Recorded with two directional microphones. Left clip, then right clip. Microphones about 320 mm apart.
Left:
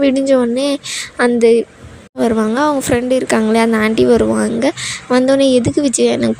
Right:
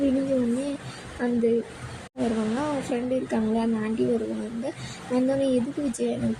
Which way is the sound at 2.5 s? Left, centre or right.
Left.